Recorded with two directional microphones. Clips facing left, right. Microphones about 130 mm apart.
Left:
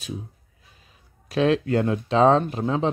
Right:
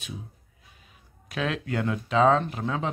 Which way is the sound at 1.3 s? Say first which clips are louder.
Left 9 dB; 35° left (ahead or behind).